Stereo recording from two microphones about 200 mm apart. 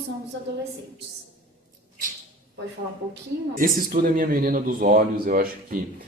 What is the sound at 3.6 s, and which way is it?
A man's voice, 45° right (ahead or behind).